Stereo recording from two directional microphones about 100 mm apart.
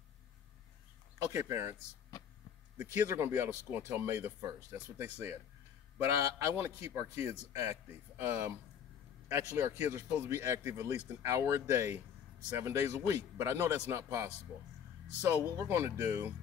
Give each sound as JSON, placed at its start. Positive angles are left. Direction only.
{"t": 1.3, "sound": "speech", "side_deg": -25}
{"t": 2.8, "sound": "speech", "side_deg": -15}
{"t": 15.4, "sound": "speech", "side_deg": -25}